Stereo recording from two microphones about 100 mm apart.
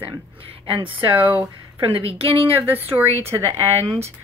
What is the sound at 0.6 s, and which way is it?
Speech, 60° right (ahead or behind).